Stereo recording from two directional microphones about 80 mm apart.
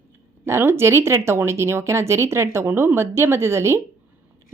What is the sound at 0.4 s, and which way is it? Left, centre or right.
Speech, right.